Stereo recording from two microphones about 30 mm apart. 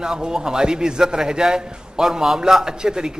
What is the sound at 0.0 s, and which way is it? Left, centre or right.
A man's voice, right.